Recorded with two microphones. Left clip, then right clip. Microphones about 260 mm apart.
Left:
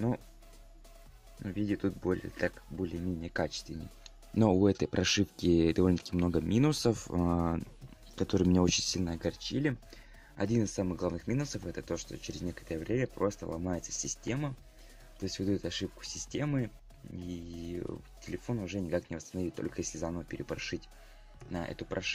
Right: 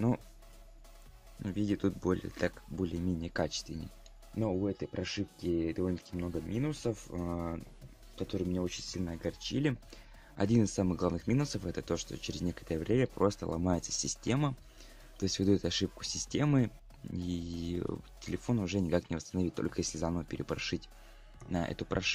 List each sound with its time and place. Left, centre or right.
1.4 s speech: centre
4.4 s speech: left; by 22.1 s centre